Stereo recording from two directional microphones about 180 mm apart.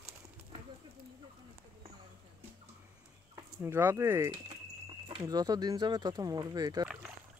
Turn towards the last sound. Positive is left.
turn(degrees=-20)  # may be behind; listen again after turning